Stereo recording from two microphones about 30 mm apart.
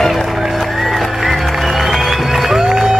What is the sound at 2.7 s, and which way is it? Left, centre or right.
Music, centre.